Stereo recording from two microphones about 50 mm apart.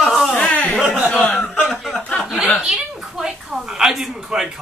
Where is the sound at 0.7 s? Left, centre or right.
Centre.